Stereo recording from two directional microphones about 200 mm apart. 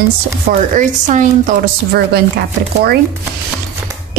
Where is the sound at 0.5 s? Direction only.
40° right (ahead or behind).